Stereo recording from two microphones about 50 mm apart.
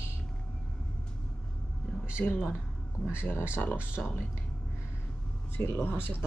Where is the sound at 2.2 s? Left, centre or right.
Left.